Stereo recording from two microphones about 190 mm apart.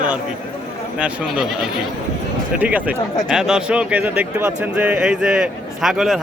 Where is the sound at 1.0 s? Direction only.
5° right (ahead or behind).